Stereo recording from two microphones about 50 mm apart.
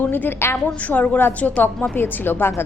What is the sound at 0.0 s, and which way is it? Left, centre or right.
Speech, left.